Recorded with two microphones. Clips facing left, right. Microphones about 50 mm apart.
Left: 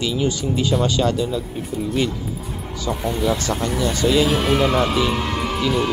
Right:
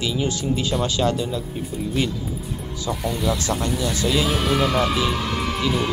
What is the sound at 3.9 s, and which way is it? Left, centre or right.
Speech, centre.